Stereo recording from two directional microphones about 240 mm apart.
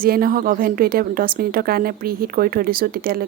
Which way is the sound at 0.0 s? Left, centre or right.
Right.